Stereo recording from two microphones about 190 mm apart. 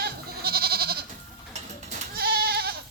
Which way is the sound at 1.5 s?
35° right (ahead or behind).